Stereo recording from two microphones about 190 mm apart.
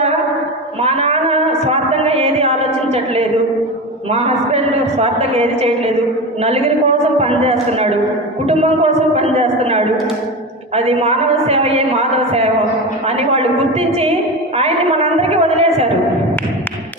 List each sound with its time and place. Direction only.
0.8 s a sound: 35° right (ahead or behind)
4.1 s a woman's voice: 35° right (ahead or behind)
15.3 s a woman's voice: 35° right (ahead or behind)